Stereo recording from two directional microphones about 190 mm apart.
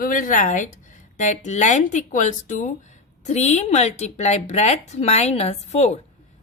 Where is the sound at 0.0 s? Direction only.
45° left (ahead or behind).